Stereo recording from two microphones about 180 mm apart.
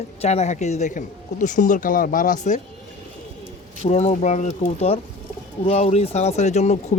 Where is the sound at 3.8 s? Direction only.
35° left (ahead or behind).